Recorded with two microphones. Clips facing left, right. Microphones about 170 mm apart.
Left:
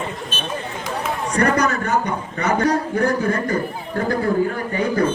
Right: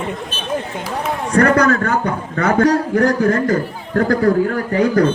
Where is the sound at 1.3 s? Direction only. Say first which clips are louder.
Right 6 dB; 60° right (ahead or behind).